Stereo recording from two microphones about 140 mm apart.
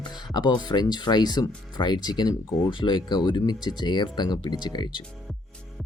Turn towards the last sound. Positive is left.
turn(degrees=35)  # may be behind; listen again after turning